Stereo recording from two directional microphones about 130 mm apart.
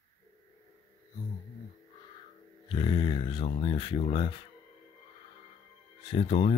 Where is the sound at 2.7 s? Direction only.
40° left (ahead or behind).